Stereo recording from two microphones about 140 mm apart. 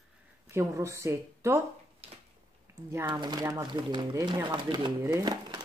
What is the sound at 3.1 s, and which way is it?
Speech, 30° right (ahead or behind).